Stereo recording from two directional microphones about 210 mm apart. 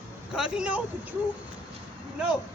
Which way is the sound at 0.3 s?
5° right (ahead or behind).